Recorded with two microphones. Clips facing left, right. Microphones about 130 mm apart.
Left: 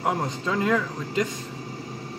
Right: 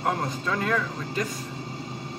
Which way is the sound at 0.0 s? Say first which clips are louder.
Left 1 dB; 20° left (ahead or behind).